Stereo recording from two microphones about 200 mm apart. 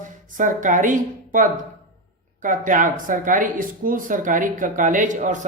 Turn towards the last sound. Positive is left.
turn(degrees=-40)  # may be behind; listen again after turning